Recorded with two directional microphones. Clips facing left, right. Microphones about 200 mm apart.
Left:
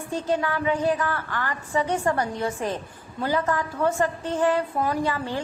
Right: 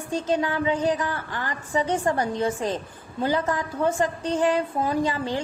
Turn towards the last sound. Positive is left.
turn(degrees=-20)  # may be behind; listen again after turning